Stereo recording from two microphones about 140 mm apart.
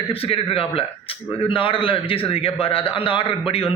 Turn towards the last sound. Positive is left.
turn(degrees=40)  # may be behind; listen again after turning